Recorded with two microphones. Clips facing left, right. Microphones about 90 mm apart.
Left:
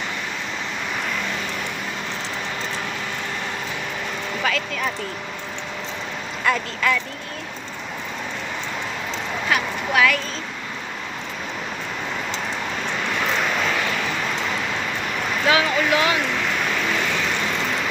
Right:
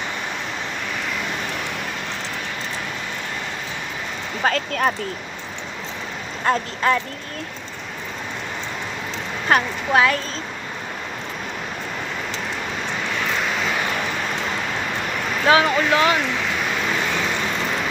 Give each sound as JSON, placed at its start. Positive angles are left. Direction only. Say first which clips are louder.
{"t": 4.4, "sound": "speech", "louder": "right 5 dB", "side_deg": -40}
{"t": 6.4, "sound": "speech", "louder": "right 2 dB", "side_deg": -35}
{"t": 9.5, "sound": "speech", "louder": "right 5 dB", "side_deg": -45}
{"t": 9.9, "sound": "speech", "louder": "right 2 dB", "side_deg": -30}
{"t": 15.4, "sound": "speech", "louder": "right 3 dB", "side_deg": -35}